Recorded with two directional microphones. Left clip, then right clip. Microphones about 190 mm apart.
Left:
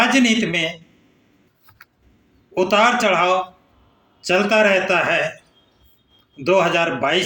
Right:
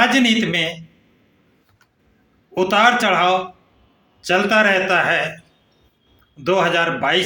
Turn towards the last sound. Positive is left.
turn(degrees=-15)  # may be behind; listen again after turning